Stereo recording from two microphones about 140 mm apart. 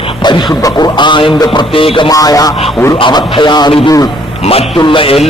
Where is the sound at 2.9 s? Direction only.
35° left (ahead or behind).